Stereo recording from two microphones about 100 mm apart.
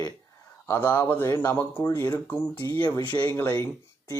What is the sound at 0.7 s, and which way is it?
Speech, 20° left (ahead or behind).